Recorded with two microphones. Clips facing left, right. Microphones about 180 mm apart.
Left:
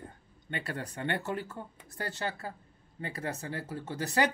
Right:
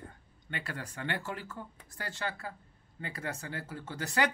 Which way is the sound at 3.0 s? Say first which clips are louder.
Left 3 dB; 25° left (ahead or behind).